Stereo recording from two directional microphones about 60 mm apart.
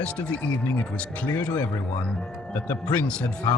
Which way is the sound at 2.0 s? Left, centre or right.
Centre.